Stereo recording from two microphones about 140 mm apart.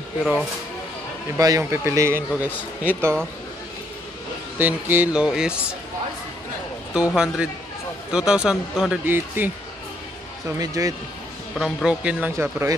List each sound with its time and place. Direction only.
1.4 s a man's voice: 20° right (ahead or behind)
4.6 s a man's voice: 15° right (ahead or behind)
6.9 s a man's voice: 5° right (ahead or behind)
10.6 s speech: 25° right (ahead or behind)
11.5 s a man's voice: 5° right (ahead or behind)
12.4 s speech: 20° right (ahead or behind)